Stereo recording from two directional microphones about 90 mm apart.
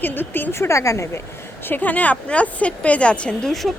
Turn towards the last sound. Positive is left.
turn(degrees=5)  # may be behind; listen again after turning